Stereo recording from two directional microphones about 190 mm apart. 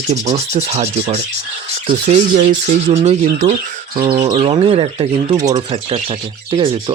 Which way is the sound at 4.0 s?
20° right (ahead or behind).